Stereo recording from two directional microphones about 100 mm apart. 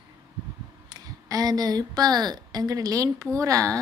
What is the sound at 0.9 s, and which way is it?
Speech, 40° right (ahead or behind).